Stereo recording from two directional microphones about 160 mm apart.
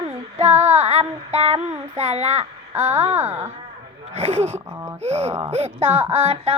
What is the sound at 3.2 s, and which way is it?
Music, 15° right (ahead or behind).